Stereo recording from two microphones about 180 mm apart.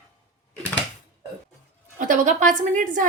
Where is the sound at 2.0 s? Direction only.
45° right (ahead or behind).